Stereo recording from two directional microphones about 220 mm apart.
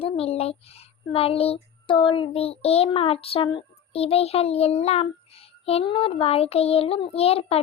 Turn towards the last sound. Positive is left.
turn(degrees=25)  # may be behind; listen again after turning